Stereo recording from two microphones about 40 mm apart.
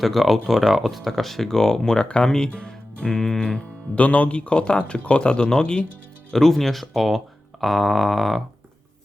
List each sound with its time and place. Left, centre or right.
0.0 s speech: centre
2.5 s music: left
3.9 s speech: left
6.3 s speech: centre